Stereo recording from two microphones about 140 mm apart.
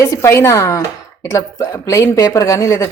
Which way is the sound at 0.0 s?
20° left (ahead or behind).